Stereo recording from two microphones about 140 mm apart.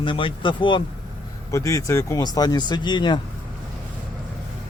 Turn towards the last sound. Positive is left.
turn(degrees=35)  # may be behind; listen again after turning